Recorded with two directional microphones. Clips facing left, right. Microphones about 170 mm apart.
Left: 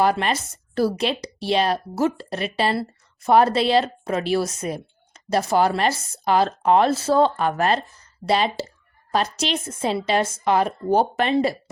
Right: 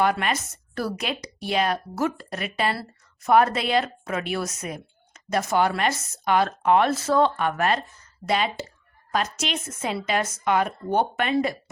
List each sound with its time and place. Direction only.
0.0 s a woman's voice: 35° left (ahead or behind)